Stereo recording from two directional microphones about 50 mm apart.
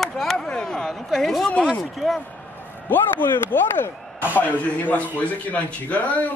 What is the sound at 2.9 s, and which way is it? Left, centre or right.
A man's voice, left.